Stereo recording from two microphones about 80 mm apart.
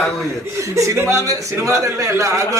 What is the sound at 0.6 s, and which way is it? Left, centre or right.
Speech, right.